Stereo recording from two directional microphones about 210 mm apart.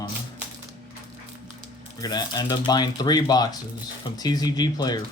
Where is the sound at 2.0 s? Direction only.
20° left (ahead or behind).